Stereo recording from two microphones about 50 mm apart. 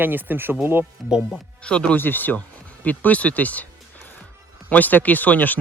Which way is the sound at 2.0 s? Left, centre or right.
Left.